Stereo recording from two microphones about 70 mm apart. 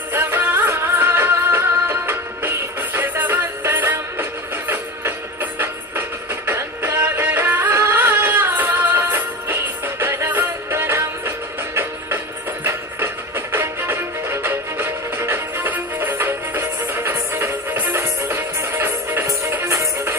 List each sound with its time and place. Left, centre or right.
0.1 s music: right